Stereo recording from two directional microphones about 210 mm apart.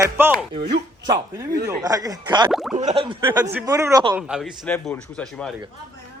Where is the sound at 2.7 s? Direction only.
35° right (ahead or behind).